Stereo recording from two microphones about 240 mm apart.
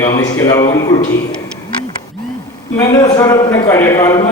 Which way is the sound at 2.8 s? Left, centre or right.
Centre.